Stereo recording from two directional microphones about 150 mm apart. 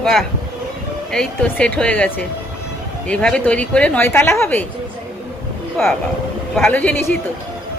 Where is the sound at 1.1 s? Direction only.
5° left (ahead or behind).